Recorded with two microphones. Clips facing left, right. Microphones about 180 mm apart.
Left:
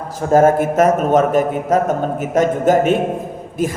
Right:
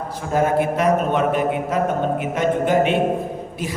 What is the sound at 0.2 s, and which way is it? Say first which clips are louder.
A man's voice: left 7 dB; 45° left (ahead or behind).